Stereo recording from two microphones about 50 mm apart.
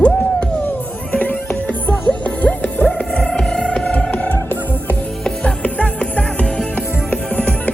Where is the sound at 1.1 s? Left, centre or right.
Left.